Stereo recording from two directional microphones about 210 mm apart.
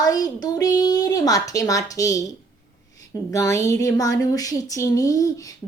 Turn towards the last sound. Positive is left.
turn(degrees=15)  # may be behind; listen again after turning